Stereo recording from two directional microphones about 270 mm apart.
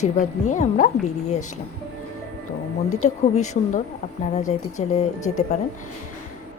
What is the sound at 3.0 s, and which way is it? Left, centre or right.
Speech, left.